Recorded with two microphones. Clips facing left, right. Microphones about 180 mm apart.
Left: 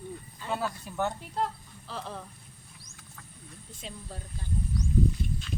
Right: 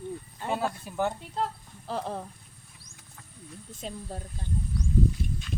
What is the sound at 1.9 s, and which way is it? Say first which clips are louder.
Speech: right 6 dB; 50° right (ahead or behind).